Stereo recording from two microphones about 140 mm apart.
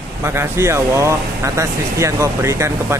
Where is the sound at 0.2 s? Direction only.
20° right (ahead or behind).